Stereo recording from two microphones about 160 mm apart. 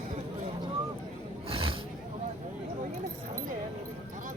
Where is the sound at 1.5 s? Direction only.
35° right (ahead or behind).